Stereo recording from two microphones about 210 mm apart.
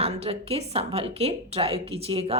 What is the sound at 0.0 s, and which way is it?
A woman's voice, 30° right (ahead or behind).